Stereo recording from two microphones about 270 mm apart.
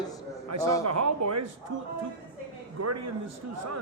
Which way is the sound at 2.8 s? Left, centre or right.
Right.